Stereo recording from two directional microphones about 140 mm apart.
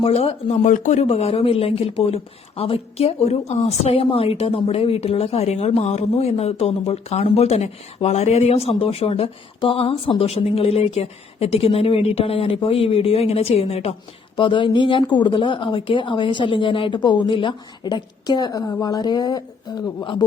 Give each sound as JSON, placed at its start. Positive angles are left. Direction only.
{"t": 0.0, "sound": "speech", "side_deg": 45}
{"t": 0.7, "sound": "speech", "side_deg": 60}
{"t": 14.3, "sound": "speech", "side_deg": 35}